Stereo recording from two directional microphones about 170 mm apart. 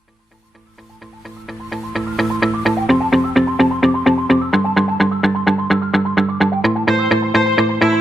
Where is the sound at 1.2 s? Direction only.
Centre (ahead or behind).